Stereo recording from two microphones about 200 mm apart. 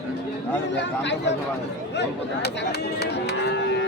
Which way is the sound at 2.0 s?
55° left (ahead or behind).